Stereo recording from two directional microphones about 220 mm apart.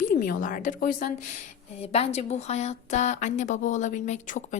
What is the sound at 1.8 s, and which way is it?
A woman's voice, 30° left (ahead or behind).